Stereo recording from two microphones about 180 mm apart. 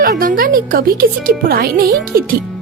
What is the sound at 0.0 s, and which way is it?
Speech, 50° right (ahead or behind).